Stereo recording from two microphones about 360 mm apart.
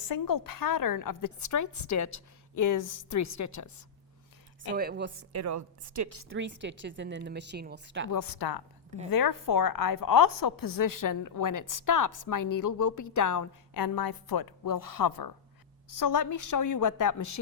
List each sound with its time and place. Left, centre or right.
0.0 s a woman's voice: left
4.7 s speech: right
5.3 s a woman's voice: right
6.2 s speech: right
8.1 s speech: left
9.0 s a woman's voice: left